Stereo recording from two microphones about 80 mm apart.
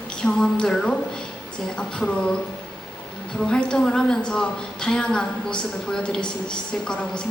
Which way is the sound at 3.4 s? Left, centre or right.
Centre.